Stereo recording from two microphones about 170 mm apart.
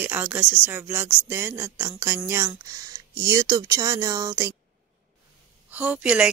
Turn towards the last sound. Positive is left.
turn(degrees=-5)  # may be behind; listen again after turning